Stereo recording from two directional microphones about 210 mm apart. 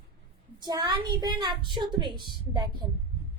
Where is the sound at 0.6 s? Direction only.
20° right (ahead or behind).